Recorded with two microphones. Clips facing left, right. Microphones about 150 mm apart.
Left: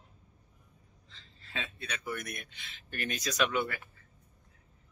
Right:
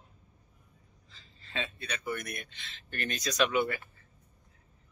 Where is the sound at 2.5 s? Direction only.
10° left (ahead or behind).